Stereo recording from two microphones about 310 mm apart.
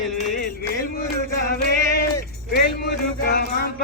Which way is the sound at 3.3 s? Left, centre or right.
Left.